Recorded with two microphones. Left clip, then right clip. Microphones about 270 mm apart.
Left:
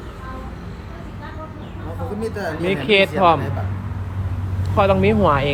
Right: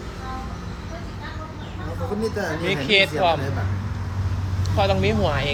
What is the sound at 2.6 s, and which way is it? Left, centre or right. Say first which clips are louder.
Speech: left 3 dB; centre.